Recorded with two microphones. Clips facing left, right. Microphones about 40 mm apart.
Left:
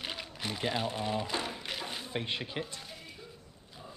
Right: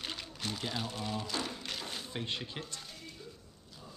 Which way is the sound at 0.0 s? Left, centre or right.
Centre.